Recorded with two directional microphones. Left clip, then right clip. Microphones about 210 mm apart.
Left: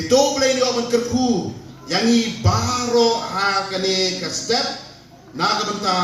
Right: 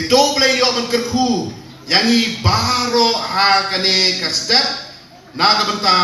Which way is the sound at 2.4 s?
55° left (ahead or behind).